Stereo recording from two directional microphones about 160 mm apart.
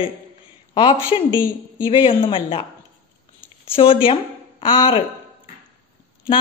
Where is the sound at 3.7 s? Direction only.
35° left (ahead or behind).